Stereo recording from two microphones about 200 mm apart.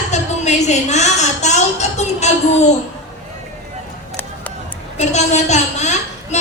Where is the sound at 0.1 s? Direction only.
35° left (ahead or behind).